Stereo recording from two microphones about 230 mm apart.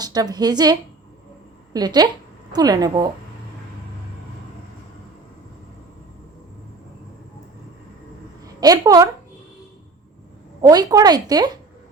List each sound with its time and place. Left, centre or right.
0.0 s speech: centre
8.6 s speech: centre
10.6 s speech: centre